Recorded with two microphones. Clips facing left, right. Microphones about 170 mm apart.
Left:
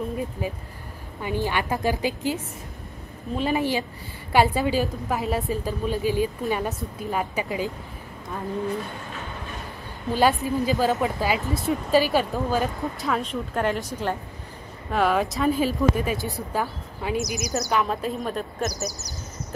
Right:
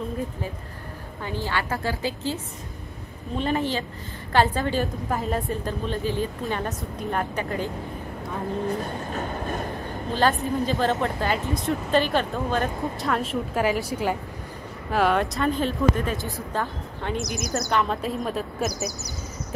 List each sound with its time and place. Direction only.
1.2 s a woman's voice: 15° left (ahead or behind)
8.6 s train: 40° right (ahead or behind)
10.1 s a woman's voice: 10° left (ahead or behind)